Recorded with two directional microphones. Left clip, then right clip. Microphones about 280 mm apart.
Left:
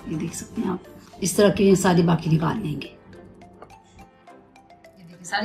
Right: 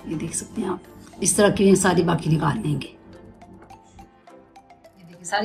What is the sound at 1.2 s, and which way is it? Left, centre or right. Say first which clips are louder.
A woman's voice: even; right.